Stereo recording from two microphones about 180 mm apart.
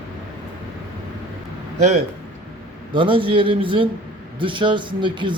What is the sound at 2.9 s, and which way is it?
Speech, 30° right (ahead or behind).